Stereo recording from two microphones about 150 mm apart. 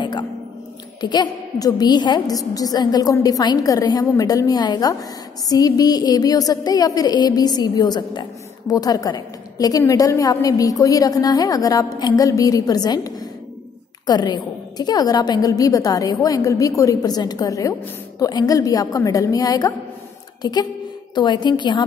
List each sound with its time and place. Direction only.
0.0 s a sound: 30° left (ahead or behind)
1.0 s a woman's voice: 30° left (ahead or behind)
21.1 s a woman's voice: 30° left (ahead or behind)